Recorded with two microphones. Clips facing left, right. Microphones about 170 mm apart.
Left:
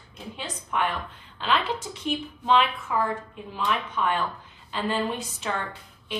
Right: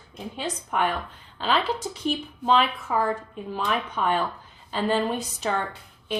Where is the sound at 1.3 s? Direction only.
40° right (ahead or behind).